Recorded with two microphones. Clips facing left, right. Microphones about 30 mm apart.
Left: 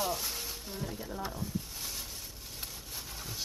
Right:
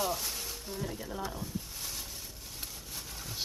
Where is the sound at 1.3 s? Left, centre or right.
Centre.